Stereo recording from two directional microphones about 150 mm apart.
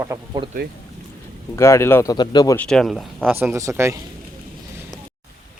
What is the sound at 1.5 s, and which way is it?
Speech, 20° left (ahead or behind).